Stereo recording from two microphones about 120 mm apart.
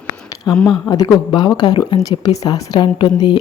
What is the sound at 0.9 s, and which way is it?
Speech, 35° left (ahead or behind).